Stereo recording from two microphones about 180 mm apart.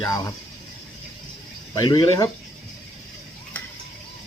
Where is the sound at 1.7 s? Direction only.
20° left (ahead or behind).